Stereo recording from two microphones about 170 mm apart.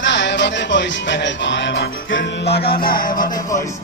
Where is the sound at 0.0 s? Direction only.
90° left; by 3.4 s 55° left (ahead or behind).